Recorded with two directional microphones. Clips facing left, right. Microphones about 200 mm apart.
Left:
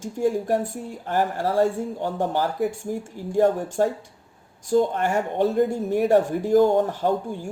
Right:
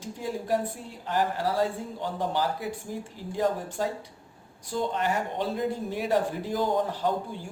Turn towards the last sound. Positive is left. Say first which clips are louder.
# left 5 dB
turn(degrees=45)  # may be behind; listen again after turning